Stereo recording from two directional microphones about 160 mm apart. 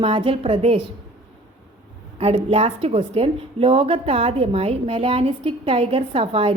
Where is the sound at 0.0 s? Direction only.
35° right (ahead or behind).